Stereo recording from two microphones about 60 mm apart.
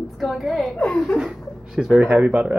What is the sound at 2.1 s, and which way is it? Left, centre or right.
Speech, right.